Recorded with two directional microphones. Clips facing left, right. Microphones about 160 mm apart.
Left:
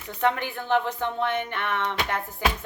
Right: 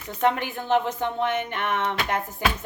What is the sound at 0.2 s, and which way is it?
A woman's voice, 20° right (ahead or behind).